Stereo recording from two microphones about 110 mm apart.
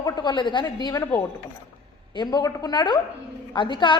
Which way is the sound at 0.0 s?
40° left (ahead or behind).